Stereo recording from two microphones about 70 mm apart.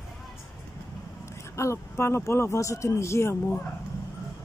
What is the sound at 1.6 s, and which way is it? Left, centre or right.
Speech, left.